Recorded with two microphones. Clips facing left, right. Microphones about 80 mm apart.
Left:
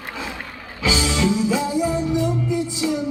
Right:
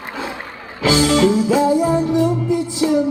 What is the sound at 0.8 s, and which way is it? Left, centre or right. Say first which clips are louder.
Music: right 7 dB; right.